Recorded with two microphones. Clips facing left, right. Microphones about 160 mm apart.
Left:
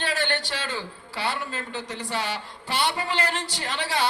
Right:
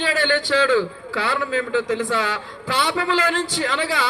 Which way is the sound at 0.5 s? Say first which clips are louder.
Right 14 dB; 90° right.